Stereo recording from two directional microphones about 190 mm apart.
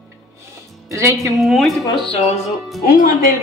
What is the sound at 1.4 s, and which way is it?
Speech, centre (ahead or behind).